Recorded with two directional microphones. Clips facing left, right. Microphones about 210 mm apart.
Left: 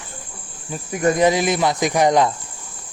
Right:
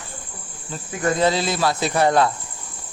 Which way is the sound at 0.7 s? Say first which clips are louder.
Left 4 dB; 20° left (ahead or behind).